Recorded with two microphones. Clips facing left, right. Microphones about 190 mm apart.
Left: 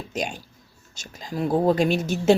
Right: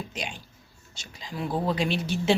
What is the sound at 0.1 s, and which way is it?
A woman's voice, 45° left (ahead or behind).